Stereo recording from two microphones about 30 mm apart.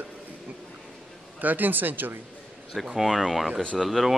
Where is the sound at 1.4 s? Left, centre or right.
Right.